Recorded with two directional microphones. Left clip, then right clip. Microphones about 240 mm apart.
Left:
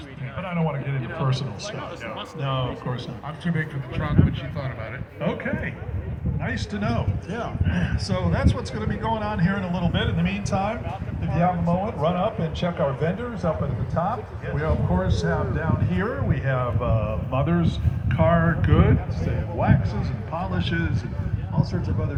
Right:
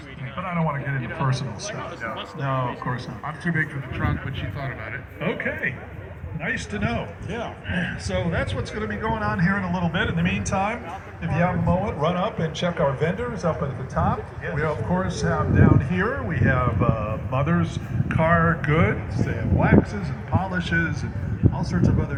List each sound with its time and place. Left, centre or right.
0.3 s a man's voice: left
5.2 s speech: left
8.1 s a man's voice: left
9.2 s a man's voice: left
9.7 s a man's voice: centre
10.0 s speech: centre
10.2 s speech: centre
11.3 s speech: right